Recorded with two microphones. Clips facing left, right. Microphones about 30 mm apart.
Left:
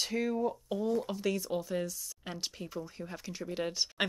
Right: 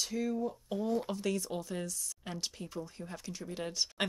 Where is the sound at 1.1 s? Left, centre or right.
Centre.